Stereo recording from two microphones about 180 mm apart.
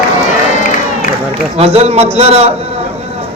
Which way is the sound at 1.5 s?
35° right (ahead or behind).